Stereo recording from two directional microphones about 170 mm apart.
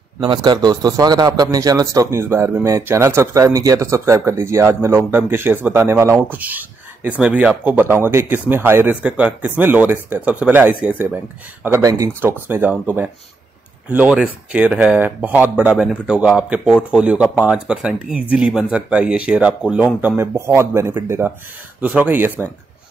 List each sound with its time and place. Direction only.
0.2 s speech: 25° right (ahead or behind)